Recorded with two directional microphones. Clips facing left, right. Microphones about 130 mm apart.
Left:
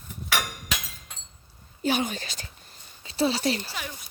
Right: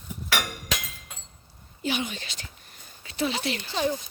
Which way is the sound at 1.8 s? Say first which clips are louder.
Left 3 dB; 40° left (ahead or behind).